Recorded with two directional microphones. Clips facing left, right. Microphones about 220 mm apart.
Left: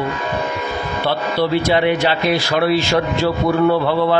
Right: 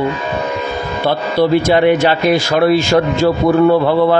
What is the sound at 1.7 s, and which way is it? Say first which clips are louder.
Speech: right 5 dB; 50° right (ahead or behind).